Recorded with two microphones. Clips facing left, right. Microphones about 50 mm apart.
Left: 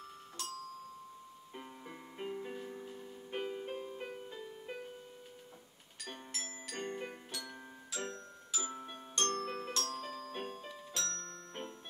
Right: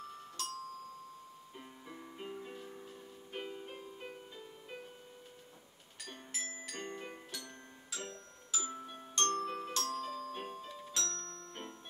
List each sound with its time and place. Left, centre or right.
0.0 s music: centre
1.5 s music: centre
6.3 s music: centre
8.9 s glockenspiel: centre
10.0 s music: centre
11.1 s music: left